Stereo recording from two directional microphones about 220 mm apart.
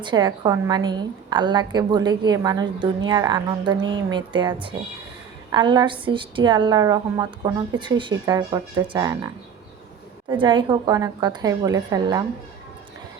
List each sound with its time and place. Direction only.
0.0 s a woman's voice: 20° right (ahead or behind)